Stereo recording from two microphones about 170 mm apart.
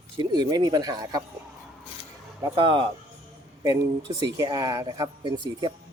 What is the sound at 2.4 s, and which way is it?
Speech, 30° right (ahead or behind).